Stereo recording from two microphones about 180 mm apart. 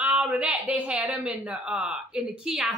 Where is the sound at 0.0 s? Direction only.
10° right (ahead or behind).